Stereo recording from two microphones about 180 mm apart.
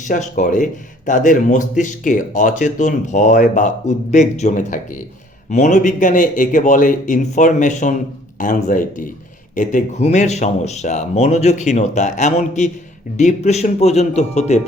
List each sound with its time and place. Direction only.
0.0 s speech: 45° left (ahead or behind)